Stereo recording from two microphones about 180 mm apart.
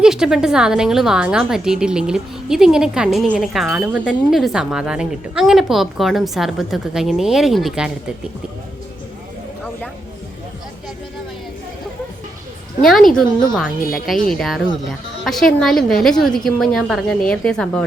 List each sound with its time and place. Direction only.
0.0 s a woman's voice: 5° right (ahead or behind)
12.8 s a woman's voice: centre (ahead or behind)